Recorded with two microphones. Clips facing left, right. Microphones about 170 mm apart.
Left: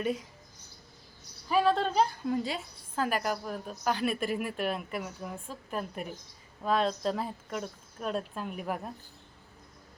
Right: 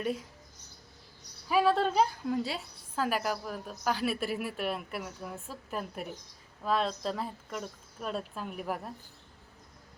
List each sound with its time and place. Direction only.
0.0 s a woman's voice: centre (ahead or behind)
1.5 s a woman's voice: 5° right (ahead or behind)